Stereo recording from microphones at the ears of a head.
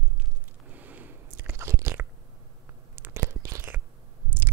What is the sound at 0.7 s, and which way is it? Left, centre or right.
Biting, right.